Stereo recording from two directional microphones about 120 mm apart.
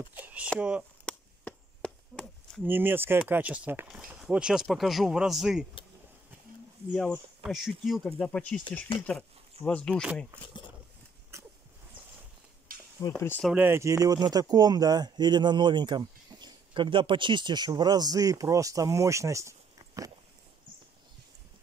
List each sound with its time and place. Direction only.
0.1 s a sound: 15° right (ahead or behind)
0.6 s speech: 10° right (ahead or behind)
1.0 s chop: 10° left (ahead or behind)
2.6 s speech: 15° right (ahead or behind)
6.9 s speech: 5° right (ahead or behind)
9.7 s speech: 10° left (ahead or behind)
11.3 s a sound: 25° right (ahead or behind)
13.0 s speech: 25° left (ahead or behind)
13.6 s speech: 20° right (ahead or behind)